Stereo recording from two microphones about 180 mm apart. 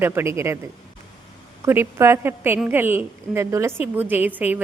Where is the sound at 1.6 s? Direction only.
15° right (ahead or behind).